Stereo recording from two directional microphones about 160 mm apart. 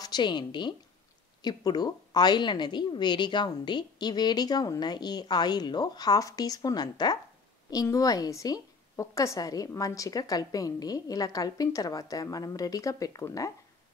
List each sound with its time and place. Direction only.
0.0 s a woman's voice: 25° left (ahead or behind)